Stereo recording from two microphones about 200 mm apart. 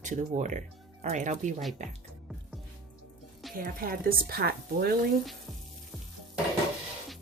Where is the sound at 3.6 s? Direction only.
45° right (ahead or behind).